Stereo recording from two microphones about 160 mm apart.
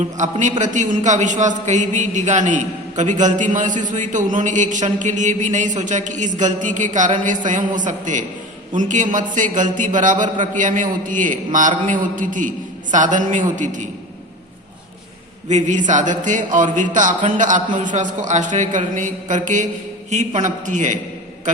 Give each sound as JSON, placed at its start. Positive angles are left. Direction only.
{"t": 0.0, "sound": "a man's voice", "side_deg": -50}
{"t": 15.4, "sound": "a man's voice", "side_deg": -50}